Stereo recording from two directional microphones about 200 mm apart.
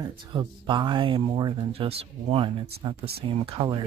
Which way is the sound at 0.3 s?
25° right (ahead or behind).